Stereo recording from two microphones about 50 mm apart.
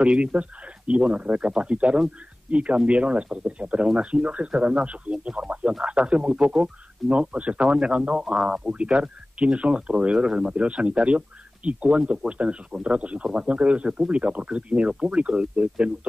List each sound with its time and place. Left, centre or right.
0.0 s speech: right